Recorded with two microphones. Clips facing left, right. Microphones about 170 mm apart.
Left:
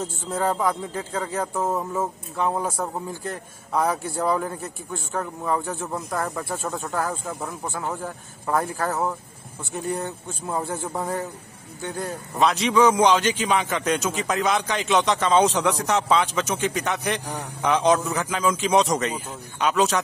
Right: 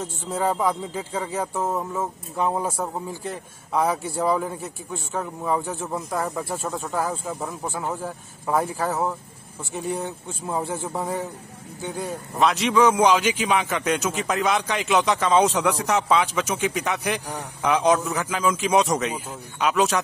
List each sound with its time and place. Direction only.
0.0 s a man's voice: 5° right (ahead or behind)
2.3 s a man's voice: 10° right (ahead or behind)